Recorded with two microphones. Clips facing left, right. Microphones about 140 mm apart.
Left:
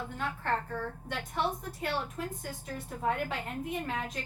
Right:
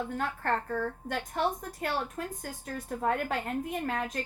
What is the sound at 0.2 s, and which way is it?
A woman's voice, 45° right (ahead or behind).